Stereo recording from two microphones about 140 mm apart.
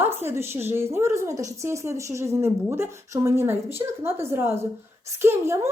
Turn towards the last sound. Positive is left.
turn(degrees=-20)  # may be behind; listen again after turning